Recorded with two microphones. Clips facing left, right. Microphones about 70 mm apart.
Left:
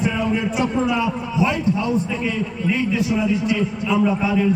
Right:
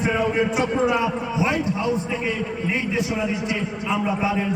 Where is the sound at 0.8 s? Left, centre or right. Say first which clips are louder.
Even; right.